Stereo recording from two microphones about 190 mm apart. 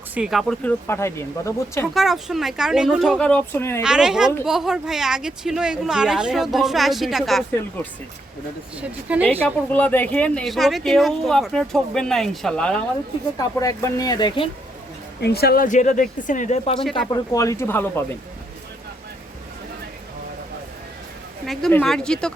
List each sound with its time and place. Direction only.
0.1 s speech: 5° right (ahead or behind)
0.9 s speech: 15° left (ahead or behind)
1.9 s speech: centre (ahead or behind)
3.8 s speech: 5° right (ahead or behind)
9.7 s speech: 10° left (ahead or behind)
13.4 s speech: 15° left (ahead or behind)
15.2 s speech: 55° left (ahead or behind); by 16.7 s 40° left (ahead or behind)
17.2 s speech: 15° left (ahead or behind)
21.4 s speech: centre (ahead or behind)